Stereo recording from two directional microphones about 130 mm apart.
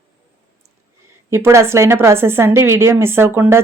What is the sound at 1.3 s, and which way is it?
A woman's voice, 20° right (ahead or behind).